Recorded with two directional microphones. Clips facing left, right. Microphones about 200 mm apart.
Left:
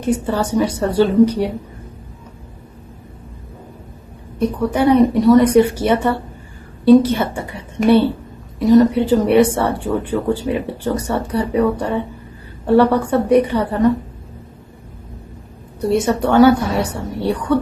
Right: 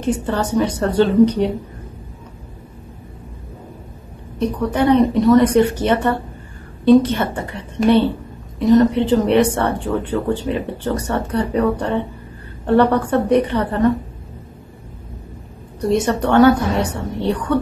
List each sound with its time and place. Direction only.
0.0 s speech: 10° left (ahead or behind)
4.4 s speech: 10° left (ahead or behind)
16.1 s speech: 10° left (ahead or behind)